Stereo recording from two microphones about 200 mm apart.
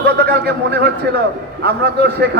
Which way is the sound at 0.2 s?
55° right (ahead or behind).